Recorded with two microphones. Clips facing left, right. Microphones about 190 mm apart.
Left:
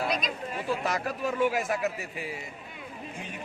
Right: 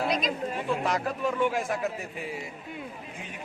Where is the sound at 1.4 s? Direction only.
10° left (ahead or behind).